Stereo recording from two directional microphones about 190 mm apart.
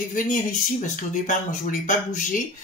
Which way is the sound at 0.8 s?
40° left (ahead or behind).